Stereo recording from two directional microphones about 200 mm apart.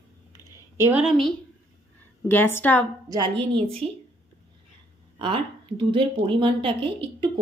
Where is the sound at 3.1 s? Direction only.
25° right (ahead or behind).